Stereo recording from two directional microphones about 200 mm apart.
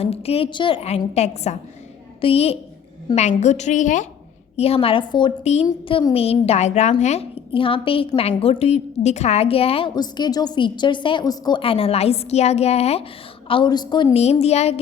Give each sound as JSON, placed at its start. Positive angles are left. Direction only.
{"t": 0.0, "sound": "a woman's voice", "side_deg": 30}
{"t": 5.6, "sound": "a woman's voice", "side_deg": 20}